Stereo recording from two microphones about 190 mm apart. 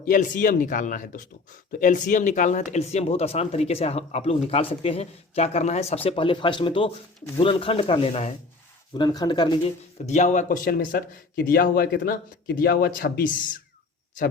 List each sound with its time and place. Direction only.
0.0 s speech: 45° left (ahead or behind)
8.9 s speech: 20° left (ahead or behind)
10.1 s speech: 40° left (ahead or behind)